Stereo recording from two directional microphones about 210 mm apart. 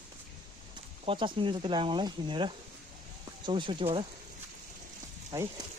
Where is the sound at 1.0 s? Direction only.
25° right (ahead or behind).